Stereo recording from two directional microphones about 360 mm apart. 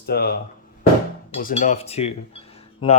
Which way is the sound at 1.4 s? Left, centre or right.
Left.